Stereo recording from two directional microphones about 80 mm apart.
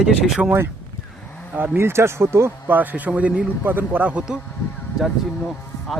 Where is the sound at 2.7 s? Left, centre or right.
Right.